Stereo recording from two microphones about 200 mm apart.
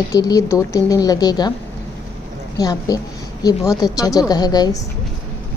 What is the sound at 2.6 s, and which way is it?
A woman's voice, 20° left (ahead or behind).